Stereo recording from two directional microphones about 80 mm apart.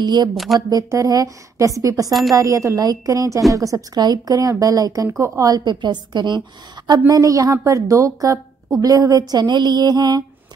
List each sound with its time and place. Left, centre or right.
0.0 s music: right
0.6 s a woman's voice: right
5.2 s a woman's voice: right
5.5 s a woman's voice: right
7.1 s a woman's voice: right
9.3 s music: right